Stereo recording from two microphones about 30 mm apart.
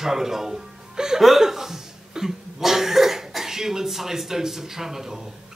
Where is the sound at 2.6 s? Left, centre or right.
Centre.